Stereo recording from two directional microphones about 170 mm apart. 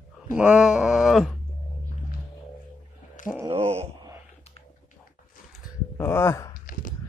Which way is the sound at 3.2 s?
45° left (ahead or behind).